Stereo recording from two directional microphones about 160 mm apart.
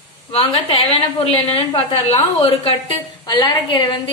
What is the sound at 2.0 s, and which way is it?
A woman's voice, 35° left (ahead or behind).